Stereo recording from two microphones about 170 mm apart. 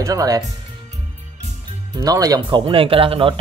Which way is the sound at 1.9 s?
20° right (ahead or behind).